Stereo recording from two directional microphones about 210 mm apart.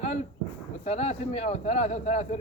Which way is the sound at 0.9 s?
30° left (ahead or behind).